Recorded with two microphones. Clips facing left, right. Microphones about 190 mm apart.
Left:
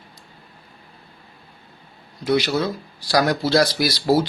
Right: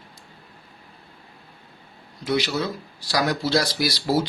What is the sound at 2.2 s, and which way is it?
Speech, 55° left (ahead or behind).